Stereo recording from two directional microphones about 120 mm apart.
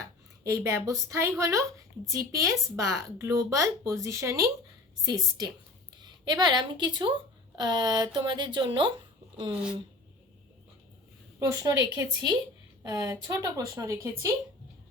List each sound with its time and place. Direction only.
0.0 s a woman's voice: 25° right (ahead or behind)
11.3 s a woman's voice: 30° right (ahead or behind)